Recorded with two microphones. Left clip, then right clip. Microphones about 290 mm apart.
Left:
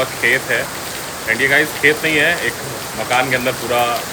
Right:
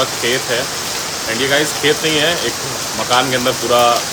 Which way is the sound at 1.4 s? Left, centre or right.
Centre.